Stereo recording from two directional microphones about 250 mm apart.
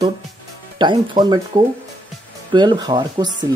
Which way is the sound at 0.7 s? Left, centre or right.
Centre.